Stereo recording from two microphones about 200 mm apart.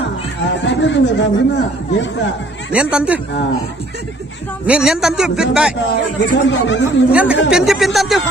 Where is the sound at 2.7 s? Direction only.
5° right (ahead or behind).